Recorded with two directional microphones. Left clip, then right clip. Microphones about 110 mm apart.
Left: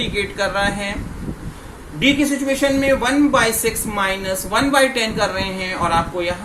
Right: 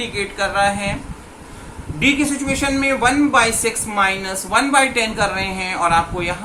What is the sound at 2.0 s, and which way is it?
A man's voice, 15° left (ahead or behind).